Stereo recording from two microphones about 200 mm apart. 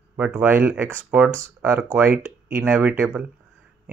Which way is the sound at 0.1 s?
10° right (ahead or behind).